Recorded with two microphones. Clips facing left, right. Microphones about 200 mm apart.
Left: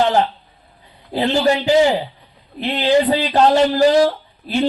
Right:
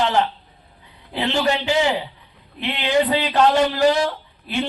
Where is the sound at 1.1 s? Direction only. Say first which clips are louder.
Left 5 dB; 35° left (ahead or behind).